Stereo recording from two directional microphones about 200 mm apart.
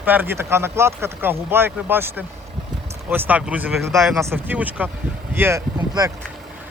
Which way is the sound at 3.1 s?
10° right (ahead or behind).